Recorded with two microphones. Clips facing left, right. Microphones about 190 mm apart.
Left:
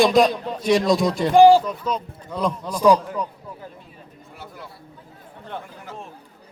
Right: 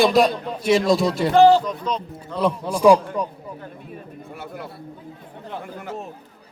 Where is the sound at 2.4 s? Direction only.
10° right (ahead or behind).